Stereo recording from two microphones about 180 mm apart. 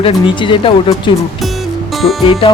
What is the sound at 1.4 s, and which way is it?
Music, centre (ahead or behind).